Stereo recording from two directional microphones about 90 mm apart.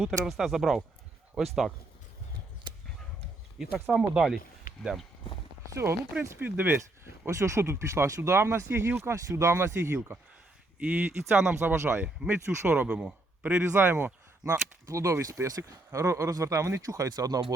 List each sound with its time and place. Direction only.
0.0 s speech: centre (ahead or behind)
3.9 s speech: 10° right (ahead or behind)
5.6 s speech: 30° right (ahead or behind)
6.4 s speech: 20° right (ahead or behind)
7.3 s speech: 35° right (ahead or behind)
10.8 s speech: 15° right (ahead or behind)
11.6 s speech: 30° right (ahead or behind)
12.0 s speech: 10° right (ahead or behind)
13.5 s speech: 20° right (ahead or behind)
14.4 s speech: 40° right (ahead or behind)